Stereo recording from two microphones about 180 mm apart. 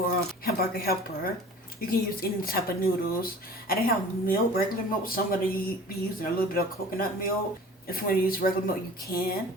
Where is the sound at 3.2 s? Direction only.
55° left (ahead or behind).